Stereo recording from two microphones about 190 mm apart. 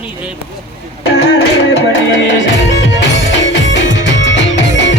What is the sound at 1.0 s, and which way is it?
Music, 65° left (ahead or behind).